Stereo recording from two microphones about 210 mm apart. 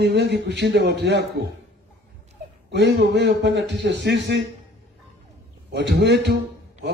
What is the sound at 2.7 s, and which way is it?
A man's voice, 55° right (ahead or behind).